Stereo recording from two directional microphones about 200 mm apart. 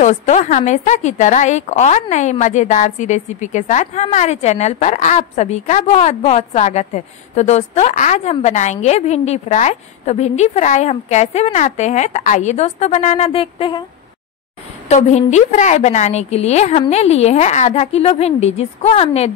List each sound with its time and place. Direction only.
0.0 s a woman's voice: 35° left (ahead or behind)
14.9 s a woman's voice: 35° left (ahead or behind)